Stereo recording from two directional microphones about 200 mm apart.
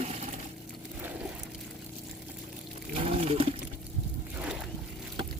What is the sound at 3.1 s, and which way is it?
Water, 30° right (ahead or behind).